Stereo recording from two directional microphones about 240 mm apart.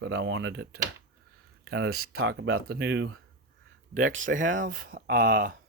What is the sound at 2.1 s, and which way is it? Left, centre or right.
Speech, right.